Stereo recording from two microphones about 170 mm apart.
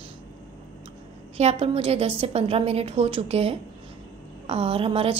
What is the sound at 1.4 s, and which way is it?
A woman's voice, 40° right (ahead or behind).